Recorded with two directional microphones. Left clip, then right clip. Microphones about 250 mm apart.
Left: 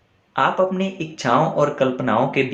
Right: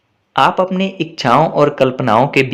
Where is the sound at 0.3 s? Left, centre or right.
Right.